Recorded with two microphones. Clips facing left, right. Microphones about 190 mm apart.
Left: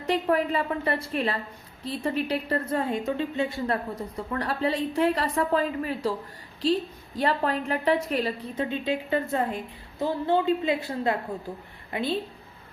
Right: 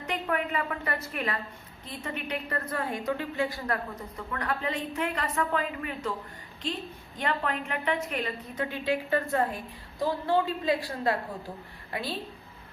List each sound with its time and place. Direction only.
0.1 s a woman's voice: 30° left (ahead or behind)
8.6 s a woman's voice: 20° left (ahead or behind)